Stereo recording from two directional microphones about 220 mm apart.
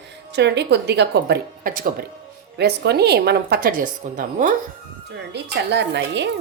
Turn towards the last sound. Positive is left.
turn(degrees=-50)  # may be behind; listen again after turning